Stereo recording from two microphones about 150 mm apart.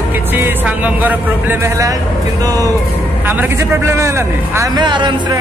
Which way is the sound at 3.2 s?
15° right (ahead or behind).